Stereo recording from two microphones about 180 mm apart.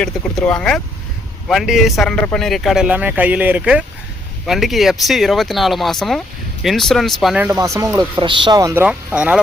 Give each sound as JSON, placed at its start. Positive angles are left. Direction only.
{"t": 0.0, "sound": "speech", "side_deg": 5}
{"t": 7.5, "sound": "speech", "side_deg": -20}